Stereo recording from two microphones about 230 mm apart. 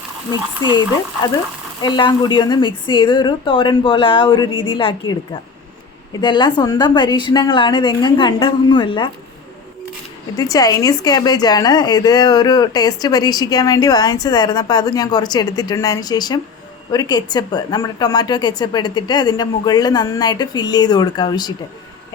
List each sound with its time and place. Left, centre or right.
0.3 s a woman's voice: centre
10.3 s a woman's voice: centre